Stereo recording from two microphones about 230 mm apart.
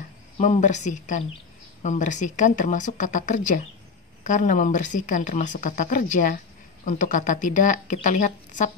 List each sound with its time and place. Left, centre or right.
0.4 s a woman's voice: left